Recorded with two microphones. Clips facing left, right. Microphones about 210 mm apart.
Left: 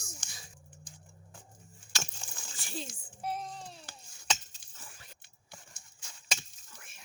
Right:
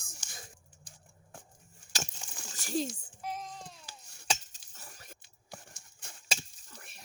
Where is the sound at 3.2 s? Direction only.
35° left (ahead or behind).